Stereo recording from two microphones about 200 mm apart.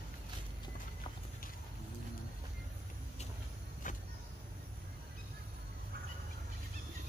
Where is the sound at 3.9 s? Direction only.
40° left (ahead or behind).